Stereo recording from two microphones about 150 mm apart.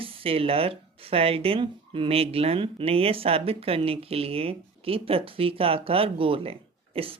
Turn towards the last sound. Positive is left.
turn(degrees=-40)  # may be behind; listen again after turning